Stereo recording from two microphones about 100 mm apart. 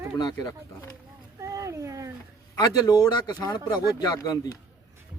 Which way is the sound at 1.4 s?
30° right (ahead or behind).